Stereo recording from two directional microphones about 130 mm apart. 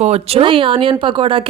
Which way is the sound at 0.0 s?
50° right (ahead or behind).